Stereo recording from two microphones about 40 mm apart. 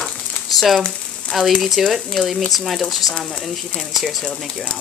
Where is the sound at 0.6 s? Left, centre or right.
Centre.